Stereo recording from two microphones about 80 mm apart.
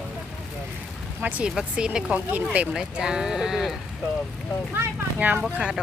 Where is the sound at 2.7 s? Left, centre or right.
Centre.